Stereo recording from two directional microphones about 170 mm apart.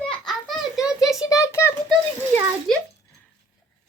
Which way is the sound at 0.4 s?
Centre (ahead or behind).